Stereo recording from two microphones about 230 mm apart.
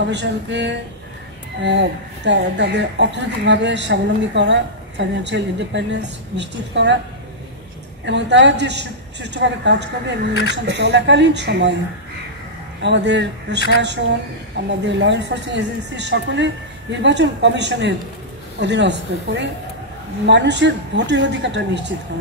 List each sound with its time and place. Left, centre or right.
0.1 s speech: right
8.0 s speech: right
12.8 s speech: right